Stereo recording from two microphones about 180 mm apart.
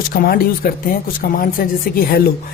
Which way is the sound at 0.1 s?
55° left (ahead or behind).